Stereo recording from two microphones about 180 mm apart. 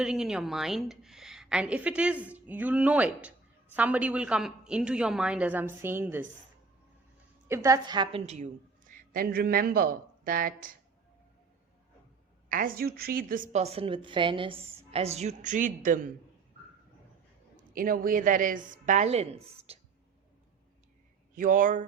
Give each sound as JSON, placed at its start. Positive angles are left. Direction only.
{"t": 0.0, "sound": "a woman's voice", "side_deg": -5}
{"t": 7.4, "sound": "a woman's voice", "side_deg": -15}
{"t": 8.9, "sound": "speech", "side_deg": -55}
{"t": 12.5, "sound": "a woman's voice", "side_deg": -50}
{"t": 17.7, "sound": "a woman's voice", "side_deg": -50}
{"t": 21.3, "sound": "a woman's voice", "side_deg": -50}